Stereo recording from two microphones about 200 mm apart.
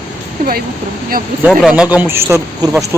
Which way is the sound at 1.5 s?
5° right (ahead or behind).